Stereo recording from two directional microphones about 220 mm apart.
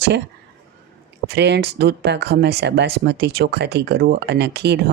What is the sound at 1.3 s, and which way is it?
Speech, 50° right (ahead or behind).